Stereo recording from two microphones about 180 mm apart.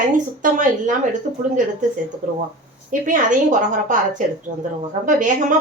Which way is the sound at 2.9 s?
45° right (ahead or behind).